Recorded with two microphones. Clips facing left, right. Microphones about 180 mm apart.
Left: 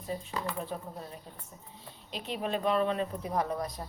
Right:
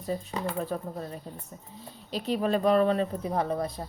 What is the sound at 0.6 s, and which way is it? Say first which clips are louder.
Speech: right 6 dB; 40° right (ahead or behind).